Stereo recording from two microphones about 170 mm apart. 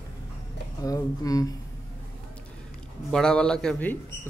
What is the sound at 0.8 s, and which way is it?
Speech, 20° left (ahead or behind).